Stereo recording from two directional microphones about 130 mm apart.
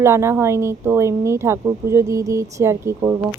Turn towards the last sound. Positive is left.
turn(degrees=-20)  # may be behind; listen again after turning